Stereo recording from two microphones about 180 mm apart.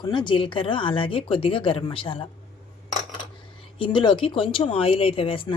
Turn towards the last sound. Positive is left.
turn(degrees=30)  # may be behind; listen again after turning